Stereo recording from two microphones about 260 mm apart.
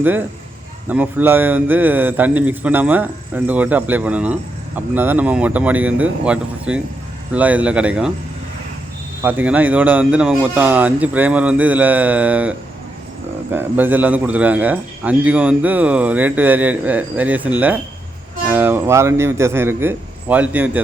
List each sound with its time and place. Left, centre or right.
0.0 s a man's voice: centre
9.2 s a man's voice: centre